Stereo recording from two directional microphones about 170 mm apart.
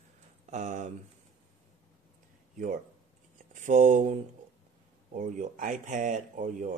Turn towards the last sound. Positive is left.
turn(degrees=-50)  # may be behind; listen again after turning